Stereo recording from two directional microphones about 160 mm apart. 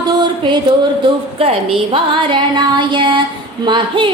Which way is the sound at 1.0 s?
40° right (ahead or behind).